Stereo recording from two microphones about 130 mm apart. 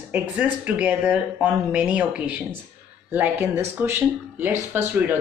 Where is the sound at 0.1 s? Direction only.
10° right (ahead or behind).